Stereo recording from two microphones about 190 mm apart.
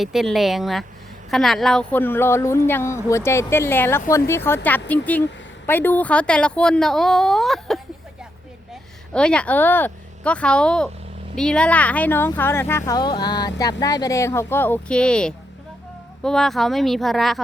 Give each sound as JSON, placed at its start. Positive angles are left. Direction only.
{"t": 0.0, "sound": "speech", "side_deg": 0}
{"t": 9.1, "sound": "speech", "side_deg": 5}